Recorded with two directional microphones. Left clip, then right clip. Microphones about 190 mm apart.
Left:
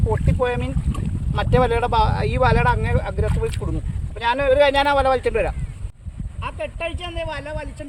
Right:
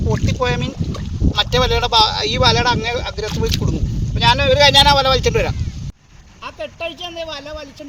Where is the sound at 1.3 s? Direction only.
5° right (ahead or behind); by 5.5 s 25° right (ahead or behind).